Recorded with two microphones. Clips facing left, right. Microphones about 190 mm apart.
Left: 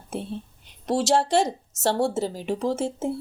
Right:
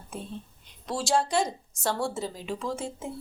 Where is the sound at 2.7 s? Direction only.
75° left (ahead or behind).